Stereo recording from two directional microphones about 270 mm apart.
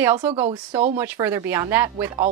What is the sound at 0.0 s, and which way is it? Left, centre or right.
A woman's voice, centre.